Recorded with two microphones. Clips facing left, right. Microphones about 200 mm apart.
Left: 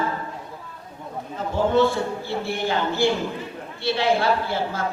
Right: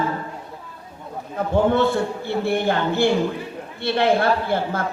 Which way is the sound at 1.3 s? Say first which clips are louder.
Right 2 dB; 55° right (ahead or behind).